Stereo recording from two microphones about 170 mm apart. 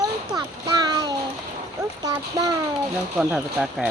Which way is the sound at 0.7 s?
25° right (ahead or behind).